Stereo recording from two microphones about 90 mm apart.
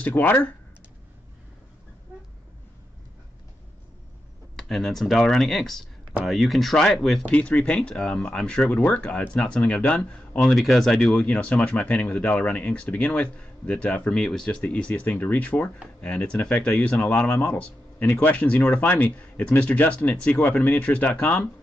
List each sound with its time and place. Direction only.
0.2 s speech: 20° left (ahead or behind)
4.6 s speech: centre (ahead or behind)
10.4 s speech: centre (ahead or behind); by 21.5 s 20° left (ahead or behind)